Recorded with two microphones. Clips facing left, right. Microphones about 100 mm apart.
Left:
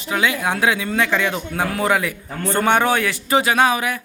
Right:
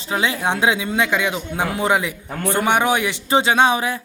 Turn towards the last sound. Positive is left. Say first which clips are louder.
# right 1 dB
turn(degrees=-30)  # may be behind; listen again after turning